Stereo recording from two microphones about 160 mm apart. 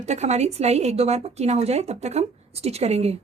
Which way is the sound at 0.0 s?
45° right (ahead or behind).